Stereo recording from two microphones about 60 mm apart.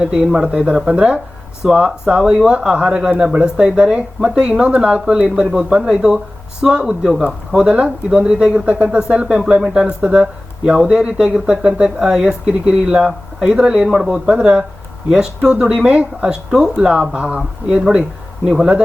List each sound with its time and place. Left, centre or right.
0.0 s speech: centre